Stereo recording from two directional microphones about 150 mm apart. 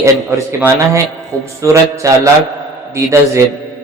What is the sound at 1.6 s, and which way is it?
Speech, 20° right (ahead or behind).